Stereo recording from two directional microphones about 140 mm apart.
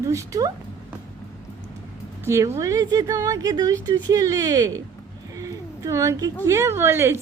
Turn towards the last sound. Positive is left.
turn(degrees=-15)  # may be behind; listen again after turning